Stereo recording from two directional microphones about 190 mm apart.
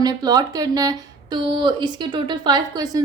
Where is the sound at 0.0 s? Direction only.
20° right (ahead or behind).